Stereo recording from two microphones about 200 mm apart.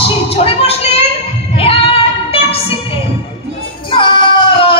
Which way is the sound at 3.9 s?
25° left (ahead or behind).